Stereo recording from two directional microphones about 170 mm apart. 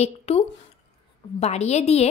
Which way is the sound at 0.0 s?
35° left (ahead or behind).